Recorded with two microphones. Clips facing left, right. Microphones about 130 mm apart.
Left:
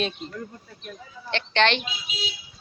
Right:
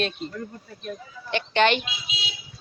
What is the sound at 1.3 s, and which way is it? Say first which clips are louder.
Speech: right 2 dB; 5° right (ahead or behind).